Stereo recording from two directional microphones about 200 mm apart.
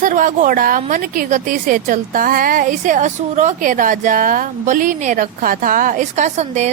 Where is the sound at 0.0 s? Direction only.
40° right (ahead or behind).